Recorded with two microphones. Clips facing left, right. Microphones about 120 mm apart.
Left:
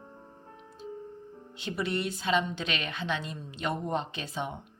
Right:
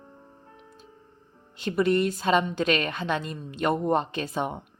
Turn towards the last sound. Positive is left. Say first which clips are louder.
# right 6 dB
turn(degrees=-50)  # may be behind; listen again after turning